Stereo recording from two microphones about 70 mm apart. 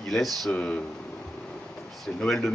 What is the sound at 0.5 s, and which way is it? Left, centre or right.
Speech, centre.